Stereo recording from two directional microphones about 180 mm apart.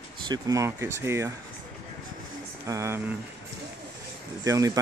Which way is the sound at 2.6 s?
15° right (ahead or behind).